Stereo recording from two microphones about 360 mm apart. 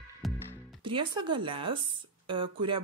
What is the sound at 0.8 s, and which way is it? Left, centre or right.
Speech, centre.